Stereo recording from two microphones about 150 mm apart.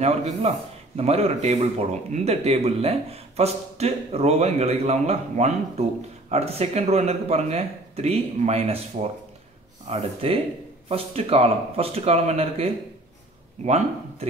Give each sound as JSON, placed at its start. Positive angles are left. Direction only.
{"t": 0.0, "sound": "speech", "side_deg": -45}